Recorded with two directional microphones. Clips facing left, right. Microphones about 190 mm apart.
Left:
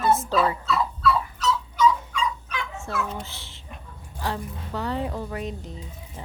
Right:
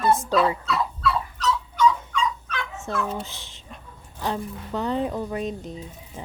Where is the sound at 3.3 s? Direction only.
15° right (ahead or behind).